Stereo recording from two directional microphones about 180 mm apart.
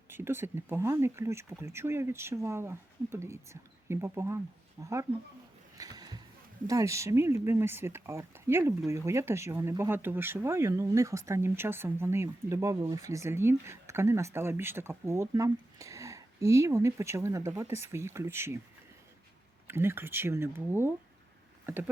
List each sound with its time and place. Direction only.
0.1 s speech: 10° right (ahead or behind)
5.7 s a sound: 20° right (ahead or behind)
6.7 s speech: 15° right (ahead or behind)
19.6 s speech: 15° right (ahead or behind)